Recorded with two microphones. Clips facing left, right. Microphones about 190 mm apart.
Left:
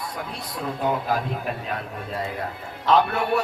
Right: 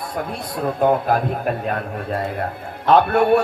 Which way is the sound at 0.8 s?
50° right (ahead or behind).